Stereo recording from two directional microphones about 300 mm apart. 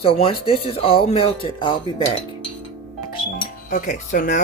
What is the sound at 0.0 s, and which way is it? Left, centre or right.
Speech, centre.